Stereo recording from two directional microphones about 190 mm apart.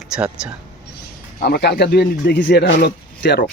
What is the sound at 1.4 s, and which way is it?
Speech, 55° left (ahead or behind).